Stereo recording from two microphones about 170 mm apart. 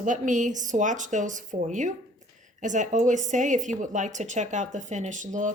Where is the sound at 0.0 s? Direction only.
45° right (ahead or behind).